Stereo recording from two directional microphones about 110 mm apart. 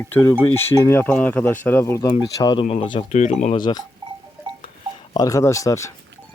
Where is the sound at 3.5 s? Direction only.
45° left (ahead or behind).